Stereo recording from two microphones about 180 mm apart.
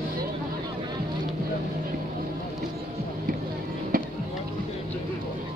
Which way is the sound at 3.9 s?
50° right (ahead or behind).